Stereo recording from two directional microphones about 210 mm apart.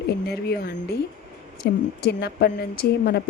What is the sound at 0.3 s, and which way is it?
Speech, 50° left (ahead or behind).